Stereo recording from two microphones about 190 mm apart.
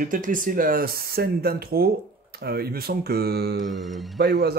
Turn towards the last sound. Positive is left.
turn(degrees=-55)  # may be behind; listen again after turning